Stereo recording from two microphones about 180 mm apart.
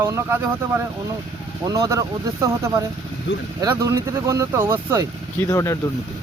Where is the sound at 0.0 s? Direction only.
15° right (ahead or behind).